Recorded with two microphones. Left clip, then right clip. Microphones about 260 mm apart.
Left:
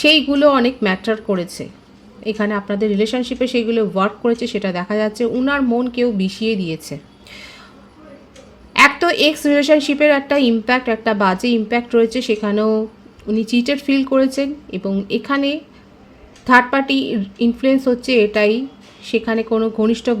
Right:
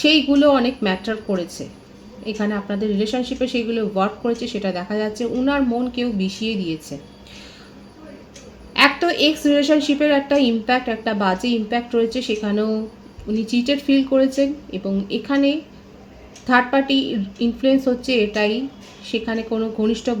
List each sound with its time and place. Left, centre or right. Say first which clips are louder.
0.0 s speech: left 3 dB; left
8.7 s speech: left 4 dB; left